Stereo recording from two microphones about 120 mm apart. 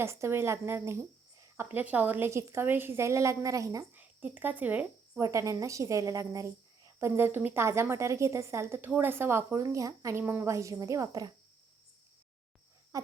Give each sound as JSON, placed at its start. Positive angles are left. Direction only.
{"t": 0.0, "sound": "a woman's voice", "side_deg": -20}
{"t": 3.9, "sound": "speech", "side_deg": -15}
{"t": 5.2, "sound": "a woman's voice", "side_deg": -25}